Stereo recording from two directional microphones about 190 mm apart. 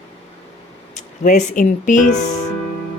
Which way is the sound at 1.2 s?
40° left (ahead or behind).